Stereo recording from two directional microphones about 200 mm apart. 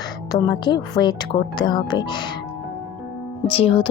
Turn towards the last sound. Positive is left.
turn(degrees=25)  # may be behind; listen again after turning